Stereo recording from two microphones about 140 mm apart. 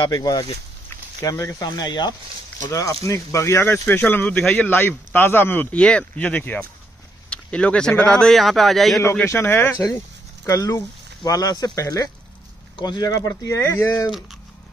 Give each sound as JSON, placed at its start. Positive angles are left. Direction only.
{"t": 0.0, "sound": "speech", "side_deg": 30}
{"t": 9.2, "sound": "speech", "side_deg": 15}